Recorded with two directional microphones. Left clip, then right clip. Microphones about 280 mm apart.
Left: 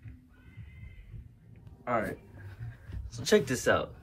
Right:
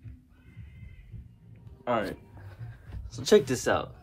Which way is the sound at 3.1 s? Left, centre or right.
Right.